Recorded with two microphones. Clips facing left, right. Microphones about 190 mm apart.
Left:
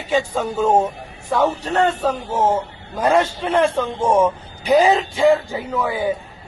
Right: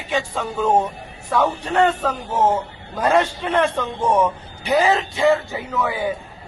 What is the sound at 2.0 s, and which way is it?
A man's voice, 10° left (ahead or behind).